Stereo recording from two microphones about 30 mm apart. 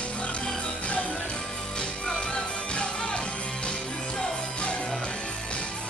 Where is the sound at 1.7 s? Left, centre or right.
Centre.